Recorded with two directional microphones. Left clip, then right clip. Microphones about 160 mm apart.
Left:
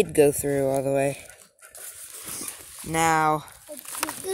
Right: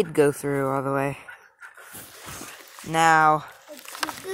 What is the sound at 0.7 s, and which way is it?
Speech, 70° right (ahead or behind).